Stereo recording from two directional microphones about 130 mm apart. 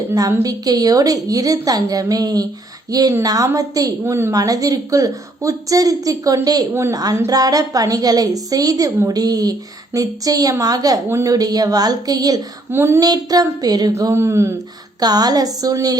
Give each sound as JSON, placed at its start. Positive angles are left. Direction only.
{"t": 0.1, "sound": "a woman's voice", "side_deg": -25}